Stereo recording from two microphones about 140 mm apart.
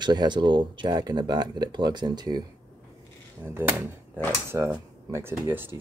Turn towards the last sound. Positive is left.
turn(degrees=-15)  # may be behind; listen again after turning